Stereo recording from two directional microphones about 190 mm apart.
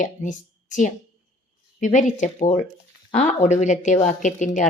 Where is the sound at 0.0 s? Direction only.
40° left (ahead or behind).